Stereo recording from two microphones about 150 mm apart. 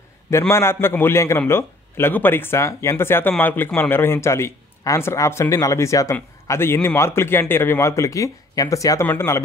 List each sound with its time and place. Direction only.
0.3 s speech: 20° left (ahead or behind)